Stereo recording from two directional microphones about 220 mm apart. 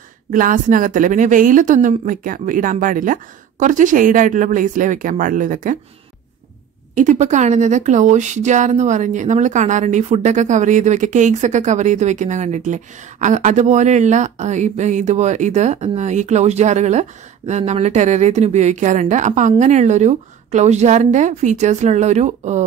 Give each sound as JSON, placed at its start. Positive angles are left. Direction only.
{"t": 0.3, "sound": "a woman's voice", "side_deg": -35}
{"t": 7.0, "sound": "a woman's voice", "side_deg": -35}